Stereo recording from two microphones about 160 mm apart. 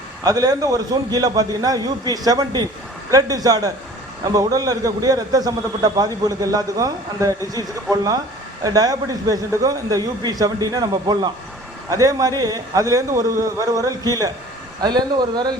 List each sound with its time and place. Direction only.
0.3 s a man's voice: 25° right (ahead or behind)
8.6 s a man's voice: 25° right (ahead or behind)